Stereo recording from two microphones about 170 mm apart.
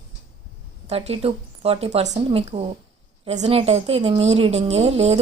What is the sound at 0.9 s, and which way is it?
Speech, 35° right (ahead or behind).